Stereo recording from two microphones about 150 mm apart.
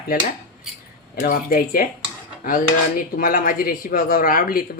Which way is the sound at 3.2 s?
70° left (ahead or behind).